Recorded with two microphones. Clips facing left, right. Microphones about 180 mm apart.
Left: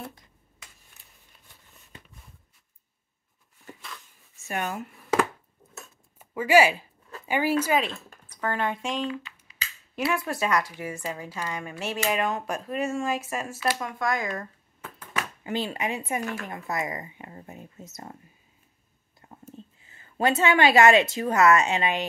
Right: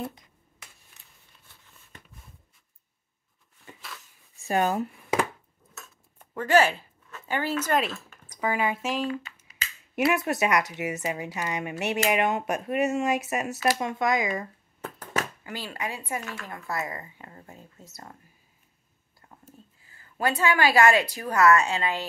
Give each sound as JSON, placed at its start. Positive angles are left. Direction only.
{"t": 4.4, "sound": "speech", "side_deg": -35}
{"t": 6.1, "sound": "speech", "side_deg": 10}
{"t": 8.4, "sound": "speech", "side_deg": -10}
{"t": 9.9, "sound": "speech", "side_deg": -20}
{"t": 14.8, "sound": "a sound", "side_deg": -40}
{"t": 15.4, "sound": "speech", "side_deg": 20}
{"t": 19.2, "sound": "a woman's voice", "side_deg": 25}